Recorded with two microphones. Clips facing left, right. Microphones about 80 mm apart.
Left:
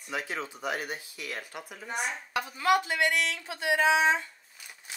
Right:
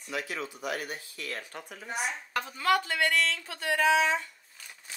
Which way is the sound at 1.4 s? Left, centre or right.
Centre.